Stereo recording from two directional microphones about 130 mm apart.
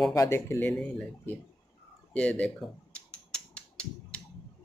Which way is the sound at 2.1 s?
10° left (ahead or behind).